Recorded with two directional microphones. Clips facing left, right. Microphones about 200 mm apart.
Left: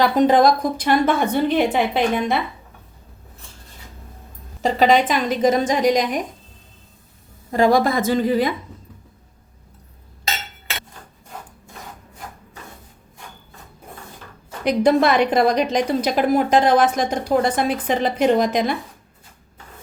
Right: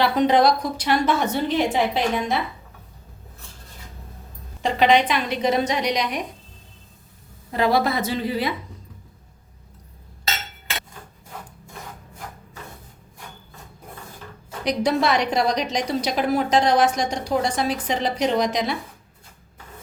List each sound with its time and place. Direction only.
0.0 s a woman's voice: 45° left (ahead or behind)
4.6 s a woman's voice: 45° left (ahead or behind)
7.5 s a woman's voice: 45° left (ahead or behind)
14.6 s a woman's voice: 55° left (ahead or behind)